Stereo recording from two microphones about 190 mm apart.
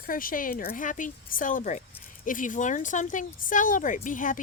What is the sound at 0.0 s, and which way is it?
A woman's voice, 45° left (ahead or behind).